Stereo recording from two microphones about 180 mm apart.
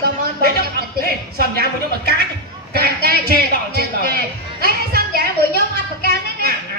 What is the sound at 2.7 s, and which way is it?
A man's voice, 60° right (ahead or behind).